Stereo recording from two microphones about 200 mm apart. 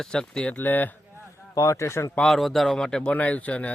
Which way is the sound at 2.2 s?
Centre (ahead or behind).